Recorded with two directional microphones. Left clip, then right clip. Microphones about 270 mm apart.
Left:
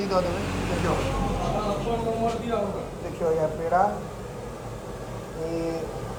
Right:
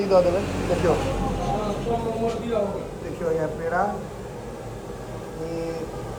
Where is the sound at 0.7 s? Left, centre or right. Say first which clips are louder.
Right 5 dB; centre.